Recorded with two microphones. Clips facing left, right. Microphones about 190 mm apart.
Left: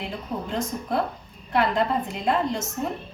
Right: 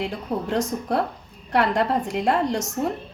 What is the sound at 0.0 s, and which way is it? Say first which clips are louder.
A woman's voice: right 4 dB; 75° right (ahead or behind).